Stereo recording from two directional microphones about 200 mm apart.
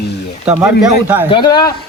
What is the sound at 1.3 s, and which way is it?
Speech, 20° left (ahead or behind).